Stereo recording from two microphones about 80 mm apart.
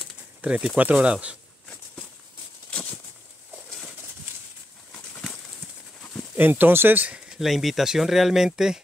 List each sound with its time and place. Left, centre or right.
0.4 s speech: centre
2.7 s a sound: centre
6.3 s speech: right
7.1 s speech: centre